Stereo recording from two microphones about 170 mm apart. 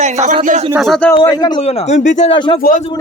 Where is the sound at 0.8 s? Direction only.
5° left (ahead or behind).